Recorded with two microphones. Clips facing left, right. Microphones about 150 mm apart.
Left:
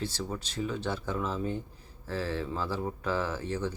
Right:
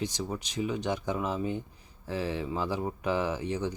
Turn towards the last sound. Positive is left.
turn(degrees=-15)  # may be behind; listen again after turning